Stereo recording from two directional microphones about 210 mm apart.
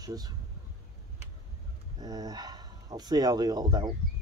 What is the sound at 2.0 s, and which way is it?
Speech, 15° right (ahead or behind).